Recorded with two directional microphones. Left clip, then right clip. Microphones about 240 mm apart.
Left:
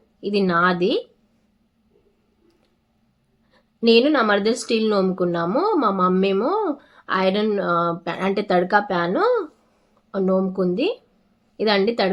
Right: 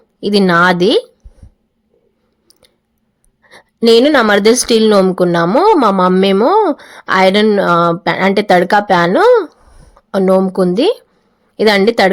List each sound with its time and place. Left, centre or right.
0.2 s speech: right
3.5 s speech: right